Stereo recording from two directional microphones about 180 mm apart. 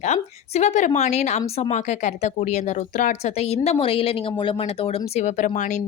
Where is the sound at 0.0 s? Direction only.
40° left (ahead or behind).